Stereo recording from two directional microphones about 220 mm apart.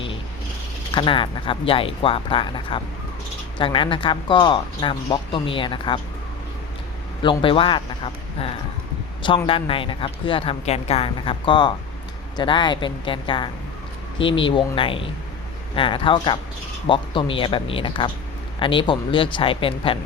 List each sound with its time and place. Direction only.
0.9 s speech: 20° left (ahead or behind)
7.2 s speech: 25° left (ahead or behind)
9.5 s speech: 25° left (ahead or behind)